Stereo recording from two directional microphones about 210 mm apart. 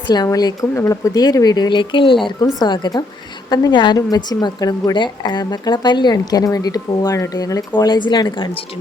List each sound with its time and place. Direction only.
0.1 s a woman's voice: 20° left (ahead or behind)